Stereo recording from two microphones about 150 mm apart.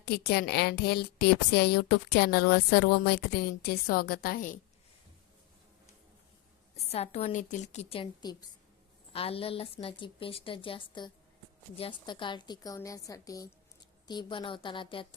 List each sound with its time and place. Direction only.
0.0 s a woman's voice: 90° left; by 4.6 s 70° left (ahead or behind)
6.8 s a woman's voice: 45° left (ahead or behind)
8.2 s a woman's voice: 30° left (ahead or behind)
9.1 s a woman's voice: 40° left (ahead or behind)